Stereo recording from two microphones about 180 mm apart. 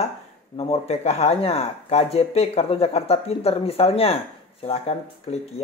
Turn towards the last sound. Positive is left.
turn(degrees=35)  # may be behind; listen again after turning